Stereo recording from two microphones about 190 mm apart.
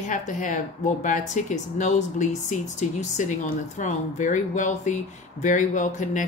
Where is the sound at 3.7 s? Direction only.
40° left (ahead or behind).